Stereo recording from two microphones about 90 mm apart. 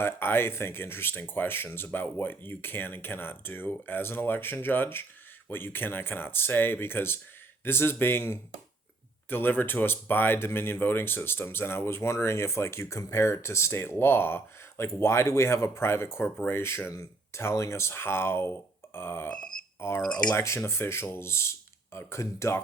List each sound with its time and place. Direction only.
0.0 s speech: 25° left (ahead or behind)